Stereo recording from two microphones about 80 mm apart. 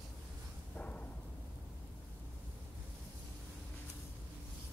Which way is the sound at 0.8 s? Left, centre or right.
Centre.